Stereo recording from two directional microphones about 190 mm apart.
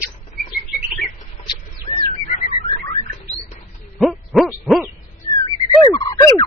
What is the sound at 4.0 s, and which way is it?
Hoot, centre (ahead or behind).